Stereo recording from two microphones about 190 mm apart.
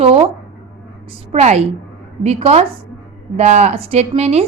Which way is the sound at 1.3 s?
35° right (ahead or behind).